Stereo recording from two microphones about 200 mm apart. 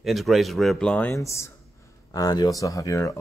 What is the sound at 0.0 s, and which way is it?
Speech, centre (ahead or behind).